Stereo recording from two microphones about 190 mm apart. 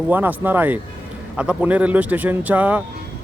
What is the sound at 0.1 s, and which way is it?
Speech, 10° right (ahead or behind).